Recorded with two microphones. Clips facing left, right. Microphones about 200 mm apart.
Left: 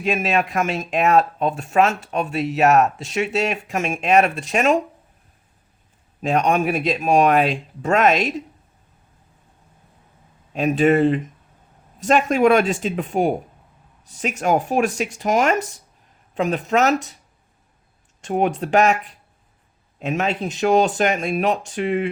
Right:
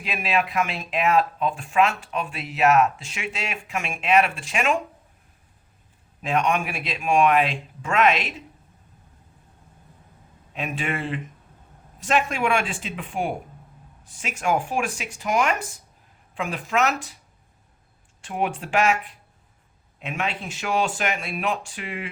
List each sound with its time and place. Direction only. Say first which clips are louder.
0.0 s speech: left 5 dB; 45° left (ahead or behind)
6.2 s speech: left 5 dB; 40° left (ahead or behind)
10.5 s speech: left 13 dB; 40° left (ahead or behind)
18.2 s speech: left 7 dB; 40° left (ahead or behind)